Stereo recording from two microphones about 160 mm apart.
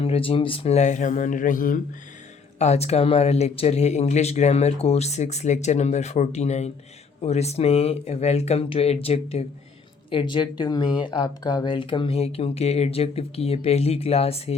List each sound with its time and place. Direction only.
0.0 s speech: 35° left (ahead or behind); by 1.8 s 60° left (ahead or behind)
2.6 s speech: 45° left (ahead or behind)